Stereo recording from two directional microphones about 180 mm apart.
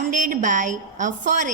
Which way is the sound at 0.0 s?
45° right (ahead or behind).